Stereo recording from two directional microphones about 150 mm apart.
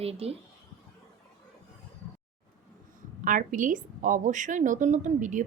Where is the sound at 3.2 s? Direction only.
60° right (ahead or behind).